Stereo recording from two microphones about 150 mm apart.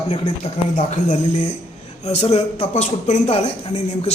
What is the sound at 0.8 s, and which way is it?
Speech, 55° left (ahead or behind).